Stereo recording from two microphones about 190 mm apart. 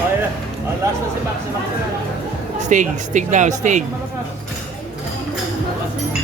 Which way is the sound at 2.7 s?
40° right (ahead or behind).